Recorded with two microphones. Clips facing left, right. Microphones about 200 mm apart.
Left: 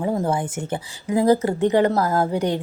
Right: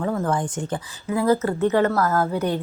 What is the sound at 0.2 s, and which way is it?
Speech, 10° left (ahead or behind).